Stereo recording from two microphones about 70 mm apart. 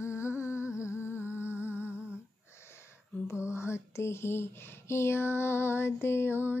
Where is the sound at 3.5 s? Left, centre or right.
Left.